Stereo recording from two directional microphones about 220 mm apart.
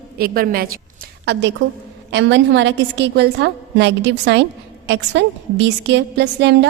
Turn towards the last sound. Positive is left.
turn(degrees=-50)  # may be behind; listen again after turning